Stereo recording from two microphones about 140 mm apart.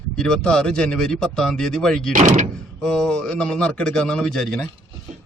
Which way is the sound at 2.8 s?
5° left (ahead or behind).